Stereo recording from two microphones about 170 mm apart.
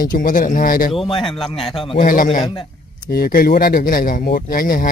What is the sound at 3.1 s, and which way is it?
Speech, 60° left (ahead or behind).